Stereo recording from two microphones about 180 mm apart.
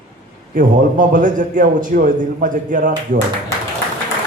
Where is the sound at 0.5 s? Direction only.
45° right (ahead or behind).